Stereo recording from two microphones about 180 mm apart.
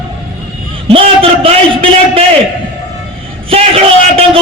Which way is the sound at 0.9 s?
30° right (ahead or behind).